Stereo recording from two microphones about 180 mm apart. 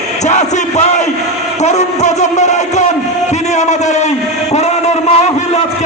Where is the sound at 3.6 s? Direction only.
40° left (ahead or behind).